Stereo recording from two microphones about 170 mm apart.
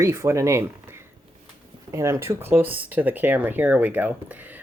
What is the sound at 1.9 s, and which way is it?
Speech, 15° right (ahead or behind).